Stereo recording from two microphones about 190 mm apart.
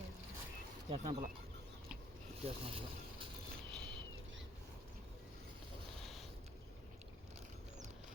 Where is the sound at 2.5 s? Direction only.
30° right (ahead or behind).